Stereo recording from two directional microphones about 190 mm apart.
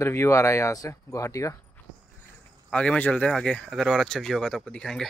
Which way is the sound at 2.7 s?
5° left (ahead or behind).